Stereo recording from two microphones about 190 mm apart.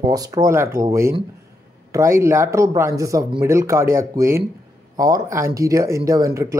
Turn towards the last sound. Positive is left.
turn(degrees=-15)  # may be behind; listen again after turning